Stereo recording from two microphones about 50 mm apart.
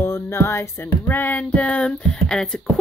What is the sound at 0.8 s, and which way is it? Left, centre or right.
Music, left.